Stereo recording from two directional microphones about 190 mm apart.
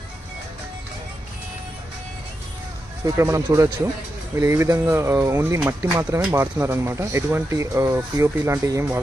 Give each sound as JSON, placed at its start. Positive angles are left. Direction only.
{"t": 3.2, "sound": "speech", "side_deg": -15}